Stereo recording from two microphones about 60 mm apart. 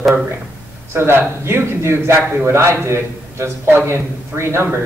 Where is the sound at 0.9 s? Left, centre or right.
Right.